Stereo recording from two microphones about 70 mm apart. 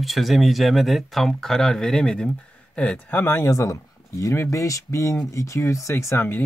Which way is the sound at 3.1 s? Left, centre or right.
Left.